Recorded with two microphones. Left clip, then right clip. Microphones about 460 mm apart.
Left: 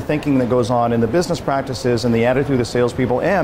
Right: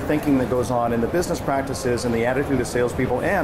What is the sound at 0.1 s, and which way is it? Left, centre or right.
Speech, left.